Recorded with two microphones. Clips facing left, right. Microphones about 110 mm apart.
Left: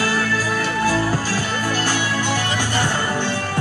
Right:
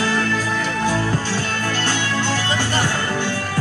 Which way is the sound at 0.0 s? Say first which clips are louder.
Even; 5° left (ahead or behind).